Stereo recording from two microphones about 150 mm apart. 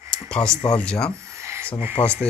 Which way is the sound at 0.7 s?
5° left (ahead or behind).